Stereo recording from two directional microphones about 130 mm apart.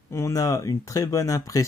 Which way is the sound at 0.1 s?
25° left (ahead or behind).